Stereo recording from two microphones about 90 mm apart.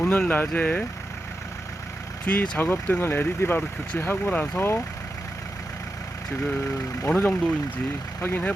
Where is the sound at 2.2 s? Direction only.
15° left (ahead or behind).